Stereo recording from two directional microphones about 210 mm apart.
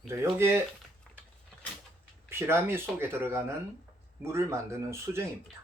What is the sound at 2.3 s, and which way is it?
Speech, 10° right (ahead or behind).